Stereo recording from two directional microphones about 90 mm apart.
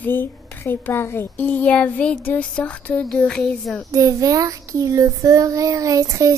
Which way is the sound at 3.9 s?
40° right (ahead or behind).